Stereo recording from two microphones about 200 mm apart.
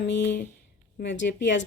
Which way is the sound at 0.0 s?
60° left (ahead or behind).